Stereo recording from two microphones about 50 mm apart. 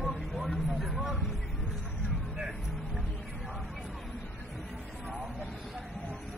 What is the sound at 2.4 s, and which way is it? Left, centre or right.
Music, centre.